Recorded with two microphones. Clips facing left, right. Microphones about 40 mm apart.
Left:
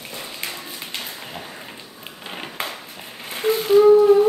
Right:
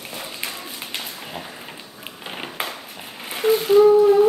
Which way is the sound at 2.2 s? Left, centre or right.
Centre.